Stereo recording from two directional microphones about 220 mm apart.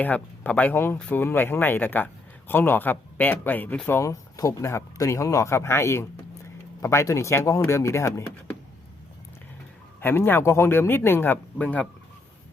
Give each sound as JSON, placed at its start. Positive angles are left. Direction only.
{"t": 0.0, "sound": "speech", "side_deg": 5}
{"t": 10.0, "sound": "speech", "side_deg": 10}